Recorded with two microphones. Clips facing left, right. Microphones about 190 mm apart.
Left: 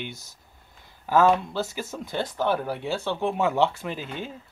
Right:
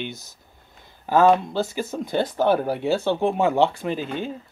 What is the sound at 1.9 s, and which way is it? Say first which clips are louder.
Speech: right 6 dB; 35° right (ahead or behind).